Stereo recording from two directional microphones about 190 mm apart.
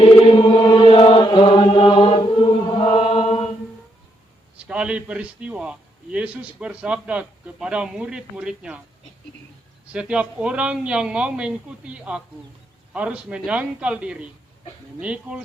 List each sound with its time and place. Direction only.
0.0 s chant: 30° left (ahead or behind)
4.6 s a man's voice: 5° right (ahead or behind)
9.9 s a man's voice: 5° right (ahead or behind)